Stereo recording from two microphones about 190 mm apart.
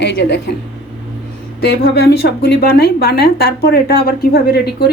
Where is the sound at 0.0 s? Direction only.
65° left (ahead or behind).